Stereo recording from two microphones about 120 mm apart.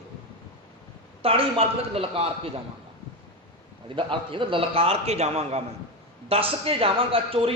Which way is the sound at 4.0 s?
45° right (ahead or behind).